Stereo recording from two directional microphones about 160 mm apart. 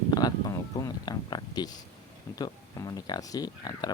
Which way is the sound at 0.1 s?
25° left (ahead or behind).